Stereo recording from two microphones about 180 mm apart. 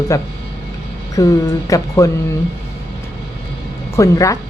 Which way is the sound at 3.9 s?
15° left (ahead or behind).